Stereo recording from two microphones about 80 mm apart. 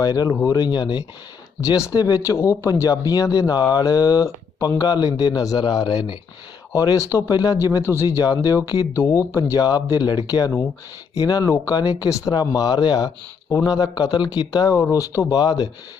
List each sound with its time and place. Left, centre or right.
0.0 s speech: left
0.7 s speech: left
1.9 s speech: left
6.7 s speech: left
7.3 s speech: left
7.5 s speech: left
8.0 s speech: left
9.0 s speech: left
9.6 s speech: left
11.4 s speech: left
11.7 s speech: left
14.7 s speech: left